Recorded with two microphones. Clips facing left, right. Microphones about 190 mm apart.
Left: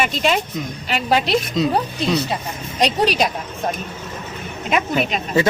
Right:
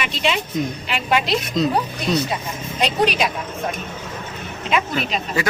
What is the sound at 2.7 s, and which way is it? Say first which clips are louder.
Speech: left 2 dB; 35° left (ahead or behind).